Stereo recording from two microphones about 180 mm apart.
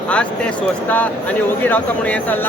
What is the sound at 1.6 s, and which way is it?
Speech, 10° left (ahead or behind).